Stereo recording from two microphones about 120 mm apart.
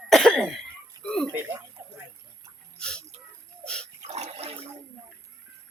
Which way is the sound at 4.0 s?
65° right (ahead or behind).